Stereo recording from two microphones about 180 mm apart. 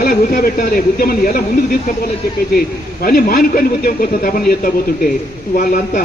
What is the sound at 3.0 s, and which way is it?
A man's voice, 55° left (ahead or behind).